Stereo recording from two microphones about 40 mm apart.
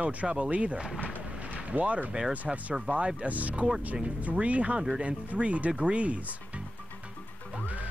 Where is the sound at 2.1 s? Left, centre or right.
Right.